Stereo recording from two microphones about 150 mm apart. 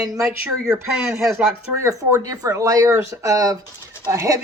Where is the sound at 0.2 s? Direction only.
5° right (ahead or behind).